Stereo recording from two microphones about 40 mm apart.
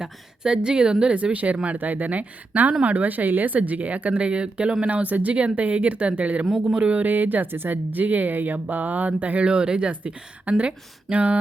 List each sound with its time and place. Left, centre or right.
0.0 s speech: right
4.9 s speech: right
6.4 s speech: centre
6.7 s speech: right
7.0 s a woman's voice: right
7.5 s a woman's voice: right
8.5 s speech: right
9.5 s speech: right
9.9 s a woman's voice: right
10.6 s speech: right